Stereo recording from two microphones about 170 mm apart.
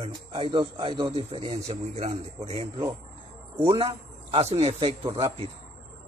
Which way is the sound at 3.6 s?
30° right (ahead or behind).